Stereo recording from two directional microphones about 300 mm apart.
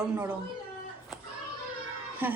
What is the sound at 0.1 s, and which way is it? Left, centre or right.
Speech, centre.